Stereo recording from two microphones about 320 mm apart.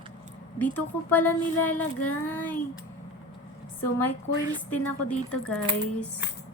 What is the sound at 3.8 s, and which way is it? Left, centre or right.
A woman's voice, centre.